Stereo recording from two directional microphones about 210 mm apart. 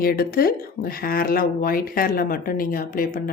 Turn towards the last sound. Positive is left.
turn(degrees=40)  # may be behind; listen again after turning